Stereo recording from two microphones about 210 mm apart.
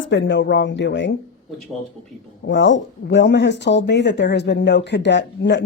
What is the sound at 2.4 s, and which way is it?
Speech, 60° left (ahead or behind).